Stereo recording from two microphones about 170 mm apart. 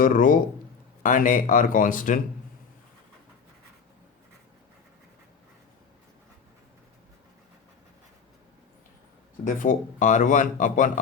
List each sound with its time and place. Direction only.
0.0 s speech: 50° left (ahead or behind)
9.6 s speech: 45° left (ahead or behind)